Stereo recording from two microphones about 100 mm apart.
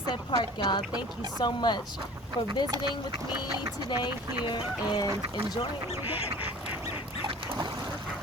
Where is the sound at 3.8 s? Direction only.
50° left (ahead or behind).